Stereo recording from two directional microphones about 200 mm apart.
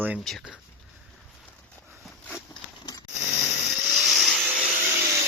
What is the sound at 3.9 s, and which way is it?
Vacuum cleaner, centre (ahead or behind).